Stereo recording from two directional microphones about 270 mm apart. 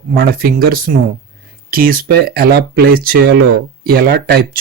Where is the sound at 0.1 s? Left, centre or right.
Right.